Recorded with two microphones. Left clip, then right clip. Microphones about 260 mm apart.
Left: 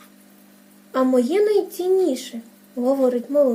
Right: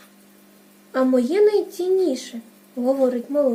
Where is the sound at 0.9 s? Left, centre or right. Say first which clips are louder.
Even; left.